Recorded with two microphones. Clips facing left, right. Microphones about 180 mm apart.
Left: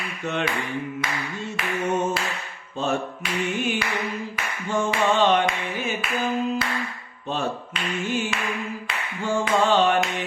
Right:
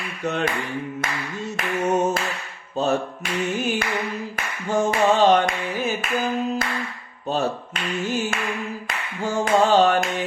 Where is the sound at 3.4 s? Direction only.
40° right (ahead or behind).